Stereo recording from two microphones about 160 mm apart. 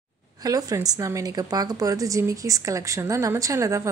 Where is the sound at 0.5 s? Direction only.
20° right (ahead or behind).